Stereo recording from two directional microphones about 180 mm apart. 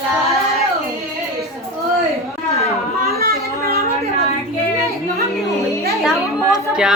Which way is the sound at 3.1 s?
55° right (ahead or behind).